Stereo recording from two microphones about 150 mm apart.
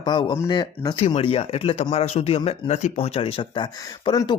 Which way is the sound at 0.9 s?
45° left (ahead or behind).